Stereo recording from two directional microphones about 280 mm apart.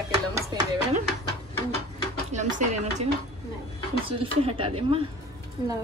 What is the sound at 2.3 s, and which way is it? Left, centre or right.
A woman's voice, right.